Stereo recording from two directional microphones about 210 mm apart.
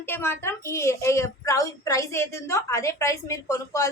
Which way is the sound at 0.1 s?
10° left (ahead or behind).